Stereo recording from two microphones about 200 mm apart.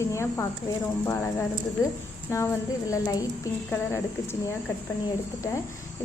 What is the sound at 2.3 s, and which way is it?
Speech, 15° left (ahead or behind).